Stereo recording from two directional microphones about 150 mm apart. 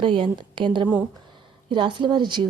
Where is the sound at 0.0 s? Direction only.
35° right (ahead or behind).